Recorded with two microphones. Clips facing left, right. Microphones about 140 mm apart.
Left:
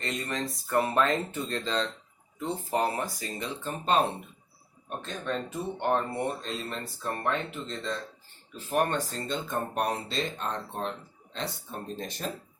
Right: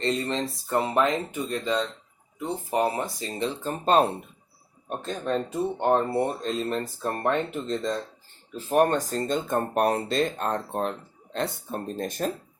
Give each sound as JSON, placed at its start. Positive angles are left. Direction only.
{"t": 0.0, "sound": "speech", "side_deg": -30}